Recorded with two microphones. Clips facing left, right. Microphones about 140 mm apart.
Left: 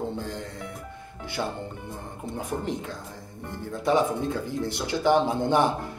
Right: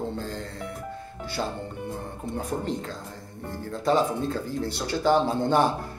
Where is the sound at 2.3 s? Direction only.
15° left (ahead or behind).